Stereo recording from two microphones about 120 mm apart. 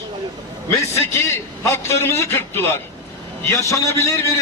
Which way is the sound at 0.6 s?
20° left (ahead or behind).